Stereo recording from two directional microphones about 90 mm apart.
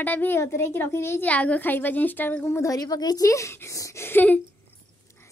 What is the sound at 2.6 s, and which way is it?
A woman's voice, 40° left (ahead or behind).